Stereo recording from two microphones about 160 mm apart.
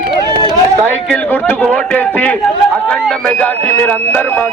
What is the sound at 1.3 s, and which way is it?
A man's voice, 10° left (ahead or behind).